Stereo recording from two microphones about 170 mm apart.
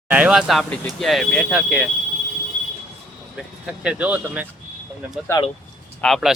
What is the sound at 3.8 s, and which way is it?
Speech, 10° right (ahead or behind).